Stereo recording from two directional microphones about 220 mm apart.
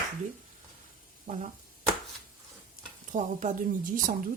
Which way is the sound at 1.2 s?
35° right (ahead or behind).